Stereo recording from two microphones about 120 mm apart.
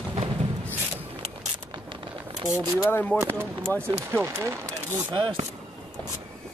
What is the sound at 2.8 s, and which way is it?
Speech, 15° left (ahead or behind).